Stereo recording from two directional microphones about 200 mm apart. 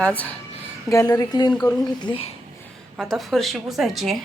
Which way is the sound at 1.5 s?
5° left (ahead or behind).